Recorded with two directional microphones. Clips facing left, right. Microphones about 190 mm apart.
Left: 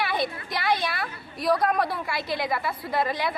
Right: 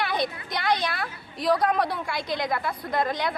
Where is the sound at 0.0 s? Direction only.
5° left (ahead or behind).